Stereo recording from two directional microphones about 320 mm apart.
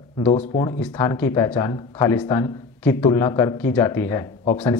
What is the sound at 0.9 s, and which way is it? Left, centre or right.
Speech, centre.